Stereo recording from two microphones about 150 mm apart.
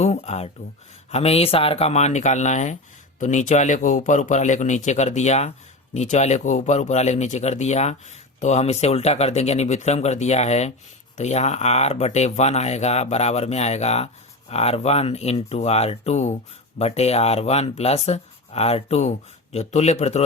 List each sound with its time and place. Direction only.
0.0 s speech: 45° left (ahead or behind)